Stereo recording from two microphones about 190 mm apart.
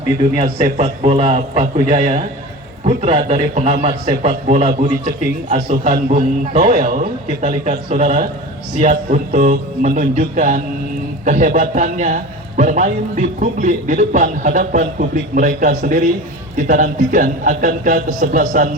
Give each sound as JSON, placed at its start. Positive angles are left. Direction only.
{"t": 0.3, "sound": "a man's voice", "side_deg": -30}